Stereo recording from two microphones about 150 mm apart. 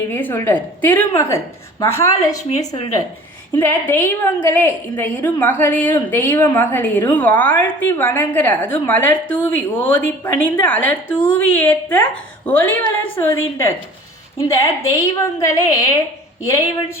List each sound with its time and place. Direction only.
0.1 s a woman's voice: 15° left (ahead or behind)
2.4 s a woman's voice: 50° left (ahead or behind)
3.6 s a woman's voice: 15° left (ahead or behind)